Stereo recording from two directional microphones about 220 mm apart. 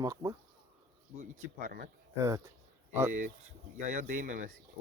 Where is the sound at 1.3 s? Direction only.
35° right (ahead or behind).